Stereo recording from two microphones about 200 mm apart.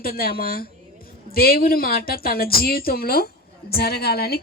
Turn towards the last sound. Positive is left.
turn(degrees=50)  # may be behind; listen again after turning